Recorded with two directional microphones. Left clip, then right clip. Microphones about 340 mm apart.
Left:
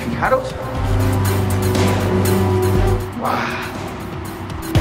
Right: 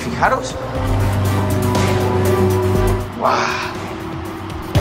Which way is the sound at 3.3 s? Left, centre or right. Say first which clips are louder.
Right 4 dB; centre.